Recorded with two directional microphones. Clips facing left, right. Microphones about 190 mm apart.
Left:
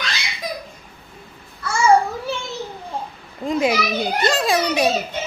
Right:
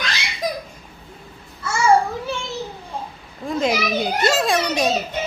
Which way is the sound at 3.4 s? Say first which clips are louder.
Left 2 dB; 20° left (ahead or behind).